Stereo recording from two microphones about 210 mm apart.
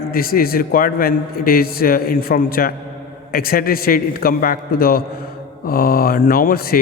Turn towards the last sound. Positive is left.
turn(degrees=45)  # may be behind; listen again after turning